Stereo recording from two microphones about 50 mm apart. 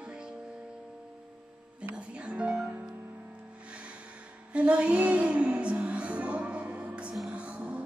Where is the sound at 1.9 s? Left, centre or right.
Right.